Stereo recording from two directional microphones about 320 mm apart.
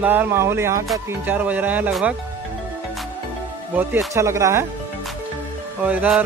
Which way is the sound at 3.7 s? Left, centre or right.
Centre.